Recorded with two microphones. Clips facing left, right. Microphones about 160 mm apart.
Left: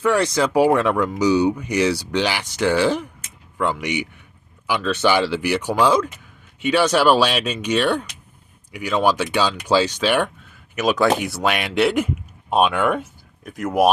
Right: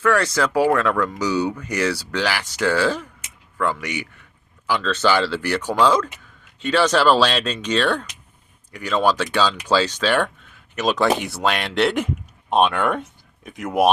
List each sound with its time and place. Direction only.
0.0 s speech: 20° left (ahead or behind); by 13.9 s centre (ahead or behind)